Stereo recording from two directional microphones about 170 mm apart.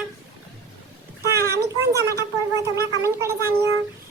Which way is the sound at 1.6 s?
20° right (ahead or behind).